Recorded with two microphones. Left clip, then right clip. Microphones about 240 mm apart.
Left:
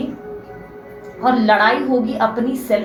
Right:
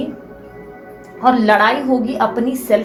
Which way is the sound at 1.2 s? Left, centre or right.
Right.